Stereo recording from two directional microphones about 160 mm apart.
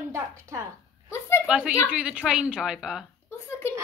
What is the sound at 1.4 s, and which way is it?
A woman's voice, 5° right (ahead or behind).